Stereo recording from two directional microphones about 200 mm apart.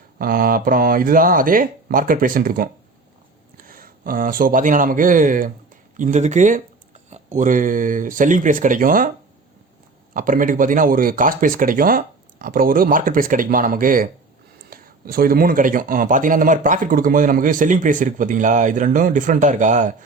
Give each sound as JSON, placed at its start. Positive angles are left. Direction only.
{"t": 0.2, "sound": "speech", "side_deg": -45}
{"t": 10.2, "sound": "a man's voice", "side_deg": -45}